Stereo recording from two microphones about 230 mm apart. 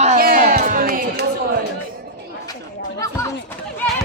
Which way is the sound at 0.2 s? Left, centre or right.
Right.